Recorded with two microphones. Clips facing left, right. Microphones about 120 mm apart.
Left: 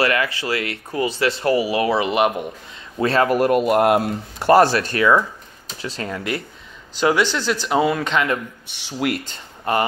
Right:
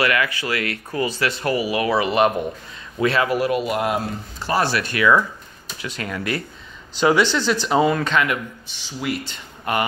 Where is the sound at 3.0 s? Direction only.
40° left (ahead or behind); by 4.7 s 55° left (ahead or behind).